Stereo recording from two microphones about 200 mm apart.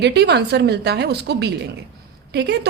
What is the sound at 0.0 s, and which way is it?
A woman's voice, 55° right (ahead or behind).